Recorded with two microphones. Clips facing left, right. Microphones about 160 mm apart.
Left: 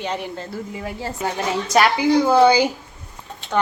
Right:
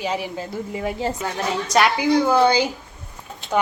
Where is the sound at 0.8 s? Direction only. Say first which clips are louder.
Right 7 dB; 20° right (ahead or behind).